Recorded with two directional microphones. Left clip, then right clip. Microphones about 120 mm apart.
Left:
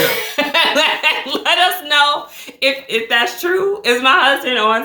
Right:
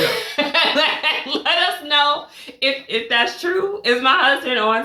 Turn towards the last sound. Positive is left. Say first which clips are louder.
# left 3 dB
turn(degrees=30)  # may be behind; listen again after turning